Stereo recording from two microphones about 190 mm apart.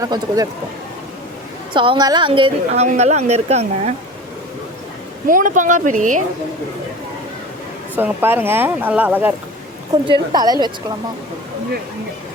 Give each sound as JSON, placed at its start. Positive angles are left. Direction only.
{"t": 0.0, "sound": "speech", "side_deg": -20}
{"t": 1.7, "sound": "a woman's voice", "side_deg": -25}
{"t": 5.3, "sound": "a woman's voice", "side_deg": -45}
{"t": 7.9, "sound": "speech", "side_deg": -10}
{"t": 10.1, "sound": "a woman's voice", "side_deg": -20}